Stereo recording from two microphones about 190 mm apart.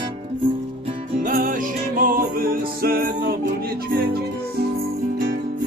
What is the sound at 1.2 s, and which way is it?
Music, 45° right (ahead or behind).